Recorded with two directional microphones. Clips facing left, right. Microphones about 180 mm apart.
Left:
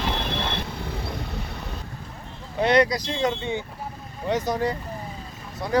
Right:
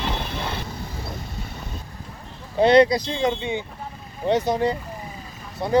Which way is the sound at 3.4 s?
15° right (ahead or behind).